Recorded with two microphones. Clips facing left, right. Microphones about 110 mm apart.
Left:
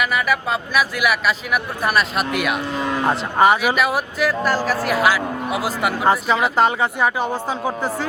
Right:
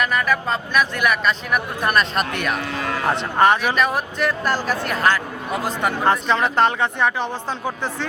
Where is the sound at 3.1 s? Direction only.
5° left (ahead or behind).